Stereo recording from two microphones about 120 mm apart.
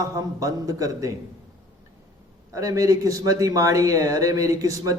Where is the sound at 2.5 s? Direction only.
30° right (ahead or behind).